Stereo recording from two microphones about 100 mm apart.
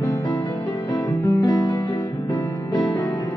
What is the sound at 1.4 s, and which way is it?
Music, 50° left (ahead or behind).